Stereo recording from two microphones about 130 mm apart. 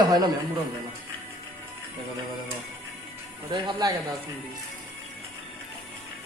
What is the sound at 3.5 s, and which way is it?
Speech, 30° right (ahead or behind).